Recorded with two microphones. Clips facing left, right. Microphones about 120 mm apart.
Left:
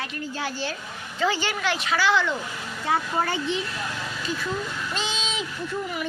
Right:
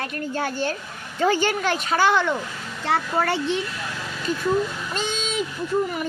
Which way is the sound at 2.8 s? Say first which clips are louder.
Right 2 dB; 70° right (ahead or behind).